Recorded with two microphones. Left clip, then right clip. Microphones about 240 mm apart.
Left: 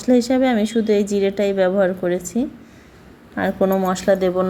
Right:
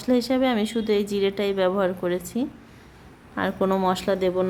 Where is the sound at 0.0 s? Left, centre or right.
Centre.